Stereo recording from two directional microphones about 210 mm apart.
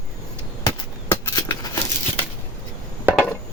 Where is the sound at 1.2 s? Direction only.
15° left (ahead or behind).